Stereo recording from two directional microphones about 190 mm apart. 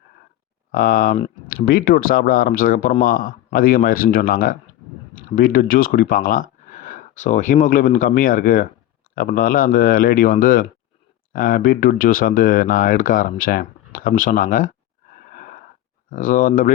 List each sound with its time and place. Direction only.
0.7 s speech: 50° left (ahead or behind)
16.0 s speech: 45° left (ahead or behind)